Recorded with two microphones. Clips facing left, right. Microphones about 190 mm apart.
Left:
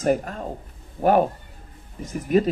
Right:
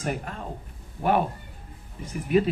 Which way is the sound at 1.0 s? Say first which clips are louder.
Left 5 dB; 45° left (ahead or behind).